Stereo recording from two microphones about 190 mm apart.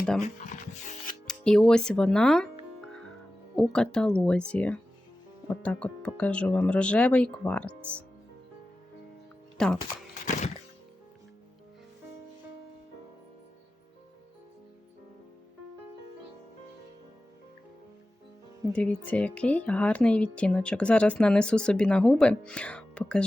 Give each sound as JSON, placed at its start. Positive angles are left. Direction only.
{"t": 0.2, "sound": "speech", "side_deg": 40}
{"t": 1.3, "sound": "speech", "side_deg": 5}
{"t": 3.5, "sound": "speech", "side_deg": 5}
{"t": 9.6, "sound": "speech", "side_deg": 5}
{"t": 10.2, "sound": "music", "side_deg": 40}
{"t": 18.7, "sound": "speech", "side_deg": 5}